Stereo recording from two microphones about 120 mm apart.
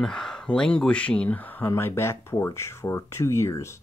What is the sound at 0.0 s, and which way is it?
Speech, 5° left (ahead or behind).